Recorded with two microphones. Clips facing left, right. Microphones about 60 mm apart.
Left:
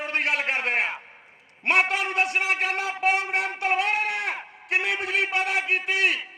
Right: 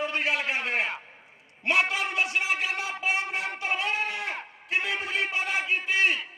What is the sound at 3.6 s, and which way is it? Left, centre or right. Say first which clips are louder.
Sheep: left 4 dB; left.